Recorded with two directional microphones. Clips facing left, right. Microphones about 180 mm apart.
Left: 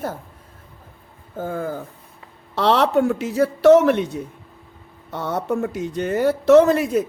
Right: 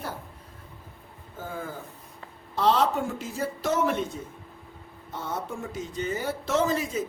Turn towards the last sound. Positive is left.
turn(degrees=65)  # may be behind; listen again after turning